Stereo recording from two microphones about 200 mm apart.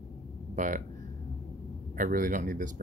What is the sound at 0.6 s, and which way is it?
Speech, 40° right (ahead or behind).